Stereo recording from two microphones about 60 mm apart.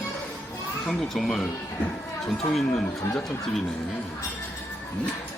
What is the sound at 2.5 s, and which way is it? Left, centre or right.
Speech, centre.